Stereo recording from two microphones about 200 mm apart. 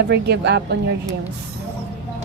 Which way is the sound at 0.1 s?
55° right (ahead or behind).